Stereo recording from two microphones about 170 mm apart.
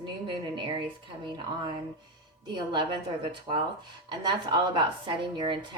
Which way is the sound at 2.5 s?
30° right (ahead or behind).